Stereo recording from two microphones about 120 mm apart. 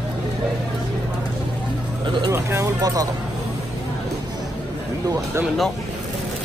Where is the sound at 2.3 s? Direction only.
25° right (ahead or behind).